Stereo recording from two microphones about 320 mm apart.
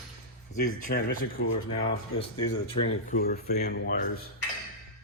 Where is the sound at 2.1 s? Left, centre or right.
Centre.